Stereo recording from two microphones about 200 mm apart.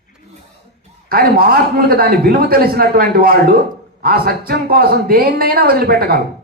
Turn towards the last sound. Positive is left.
turn(degrees=-50)  # may be behind; listen again after turning